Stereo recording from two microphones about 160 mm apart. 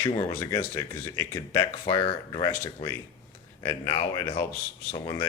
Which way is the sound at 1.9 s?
30° left (ahead or behind).